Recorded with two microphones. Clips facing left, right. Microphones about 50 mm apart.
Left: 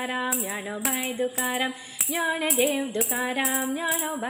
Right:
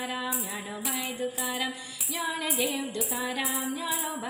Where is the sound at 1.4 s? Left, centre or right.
Left.